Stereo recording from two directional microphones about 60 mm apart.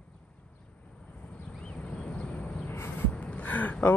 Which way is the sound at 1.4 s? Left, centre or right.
Centre.